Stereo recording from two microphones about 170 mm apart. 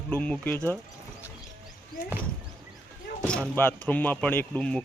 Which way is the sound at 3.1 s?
55° left (ahead or behind).